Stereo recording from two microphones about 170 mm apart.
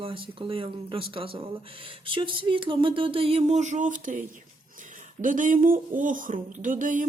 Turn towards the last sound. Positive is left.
turn(degrees=-50)  # may be behind; listen again after turning